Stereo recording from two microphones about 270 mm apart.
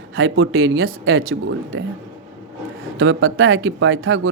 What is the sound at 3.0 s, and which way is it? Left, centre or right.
Speech, right.